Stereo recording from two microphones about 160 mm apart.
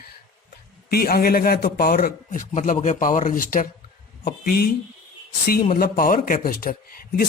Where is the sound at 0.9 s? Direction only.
70° left (ahead or behind).